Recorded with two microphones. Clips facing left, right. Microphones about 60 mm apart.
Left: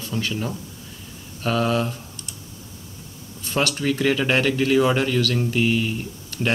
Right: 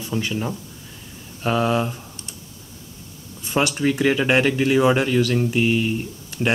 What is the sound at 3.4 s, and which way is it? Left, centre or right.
Speech, centre.